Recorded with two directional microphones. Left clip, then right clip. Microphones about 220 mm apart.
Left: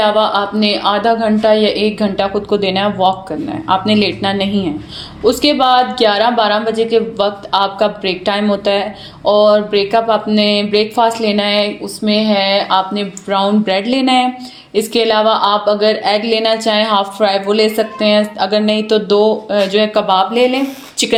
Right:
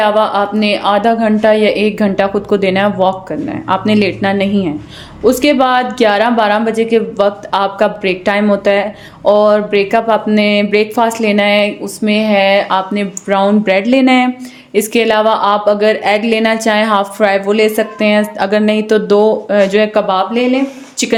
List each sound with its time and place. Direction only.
0.0 s speech: 35° right (ahead or behind)